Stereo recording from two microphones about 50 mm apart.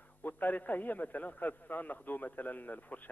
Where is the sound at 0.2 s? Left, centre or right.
Left.